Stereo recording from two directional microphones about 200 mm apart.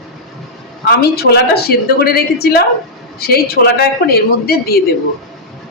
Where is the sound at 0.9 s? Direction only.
55° left (ahead or behind).